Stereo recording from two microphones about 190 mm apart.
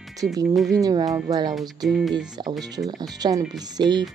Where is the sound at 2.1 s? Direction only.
20° right (ahead or behind).